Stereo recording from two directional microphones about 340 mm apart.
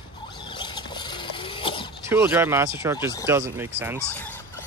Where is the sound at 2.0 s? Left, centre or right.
Centre.